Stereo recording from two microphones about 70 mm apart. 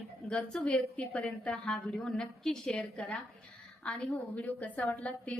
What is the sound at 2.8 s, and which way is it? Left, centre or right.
A woman's voice, centre.